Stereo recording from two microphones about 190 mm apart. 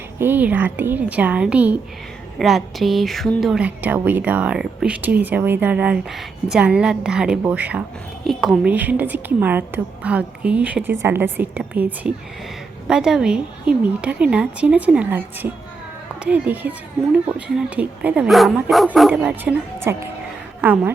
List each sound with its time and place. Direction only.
0.2 s a woman's voice: 10° right (ahead or behind)